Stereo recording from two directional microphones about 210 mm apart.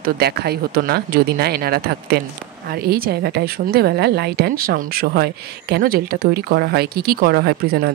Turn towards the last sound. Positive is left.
turn(degrees=-50)  # may be behind; listen again after turning